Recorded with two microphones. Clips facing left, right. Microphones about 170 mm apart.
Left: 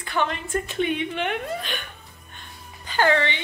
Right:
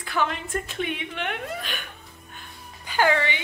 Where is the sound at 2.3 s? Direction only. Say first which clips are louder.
Left 1 dB; 10° right (ahead or behind).